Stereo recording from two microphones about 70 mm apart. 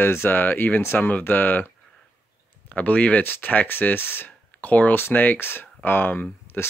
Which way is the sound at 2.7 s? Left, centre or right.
Left.